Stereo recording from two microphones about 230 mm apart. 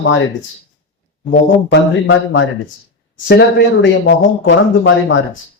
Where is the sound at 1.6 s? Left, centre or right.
Left.